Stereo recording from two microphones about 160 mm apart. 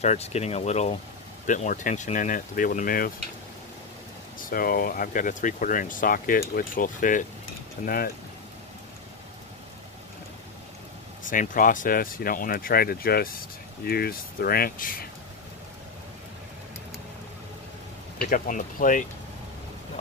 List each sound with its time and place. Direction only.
0.0 s speech: 40° left (ahead or behind)
1.4 s speech: 55° left (ahead or behind)
4.4 s speech: 60° left (ahead or behind)
11.2 s speech: 55° left (ahead or behind)
18.2 s speech: 60° left (ahead or behind)